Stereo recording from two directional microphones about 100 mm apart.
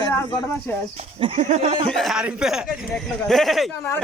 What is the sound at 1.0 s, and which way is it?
Speech, 80° right.